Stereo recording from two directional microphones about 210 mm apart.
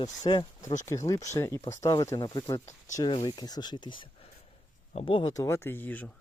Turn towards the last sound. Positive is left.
turn(degrees=10)  # may be behind; listen again after turning